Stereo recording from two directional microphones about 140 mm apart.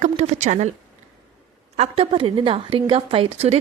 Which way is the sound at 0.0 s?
55° right (ahead or behind).